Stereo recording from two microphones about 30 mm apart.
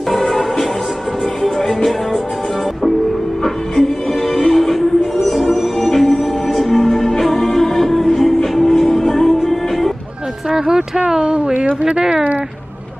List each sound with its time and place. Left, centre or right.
0.1 s music: centre
4.5 s music: centre
11.1 s a sound: right
12.0 s speech: right